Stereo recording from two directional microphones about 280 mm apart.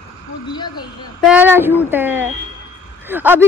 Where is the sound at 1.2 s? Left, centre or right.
Centre.